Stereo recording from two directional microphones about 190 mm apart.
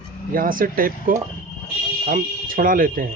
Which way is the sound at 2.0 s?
45° right (ahead or behind).